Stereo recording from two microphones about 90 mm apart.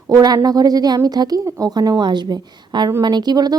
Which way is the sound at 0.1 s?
40° right (ahead or behind).